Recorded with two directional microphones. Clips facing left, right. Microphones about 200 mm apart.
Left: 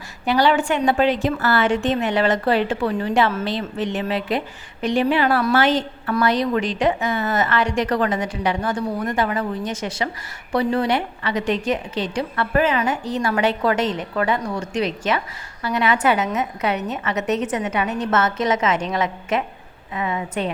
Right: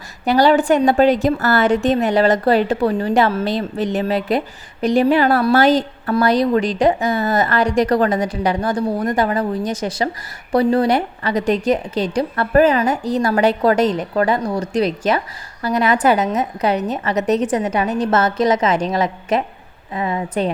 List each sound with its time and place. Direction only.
0.3 s a woman's voice: 40° right (ahead or behind)